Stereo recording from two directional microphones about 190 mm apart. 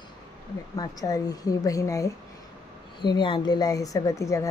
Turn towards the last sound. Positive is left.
turn(degrees=15)  # may be behind; listen again after turning